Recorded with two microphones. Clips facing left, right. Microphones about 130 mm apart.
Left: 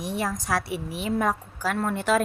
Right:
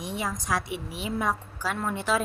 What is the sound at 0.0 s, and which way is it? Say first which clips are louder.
Speech: left 3 dB; 45° left (ahead or behind).